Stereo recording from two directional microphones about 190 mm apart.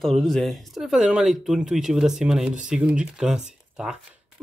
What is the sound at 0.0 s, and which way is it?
Speech, centre (ahead or behind).